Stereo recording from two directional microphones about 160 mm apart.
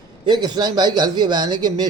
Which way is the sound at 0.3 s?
25° right (ahead or behind).